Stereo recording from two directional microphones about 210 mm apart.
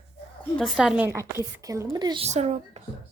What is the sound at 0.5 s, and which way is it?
A woman's voice, centre (ahead or behind).